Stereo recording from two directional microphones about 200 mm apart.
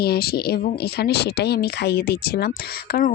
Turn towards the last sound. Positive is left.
turn(degrees=45)  # may be behind; listen again after turning